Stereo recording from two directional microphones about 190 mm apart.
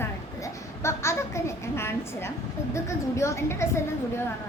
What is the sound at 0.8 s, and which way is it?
A child's voice, 15° left (ahead or behind).